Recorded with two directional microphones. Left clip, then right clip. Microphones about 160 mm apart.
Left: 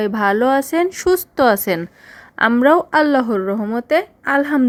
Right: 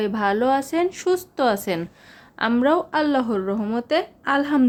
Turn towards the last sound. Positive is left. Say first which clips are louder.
# left 4 dB
turn(degrees=25)  # may be behind; listen again after turning